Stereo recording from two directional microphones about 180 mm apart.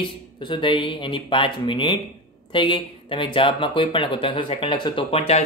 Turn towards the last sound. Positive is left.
turn(degrees=25)  # may be behind; listen again after turning